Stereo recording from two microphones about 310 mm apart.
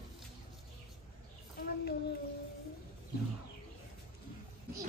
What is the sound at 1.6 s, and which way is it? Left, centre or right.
Child singing, left.